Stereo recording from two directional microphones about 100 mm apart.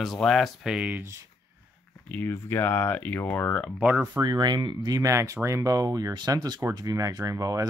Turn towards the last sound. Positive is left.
turn(degrees=-35)  # may be behind; listen again after turning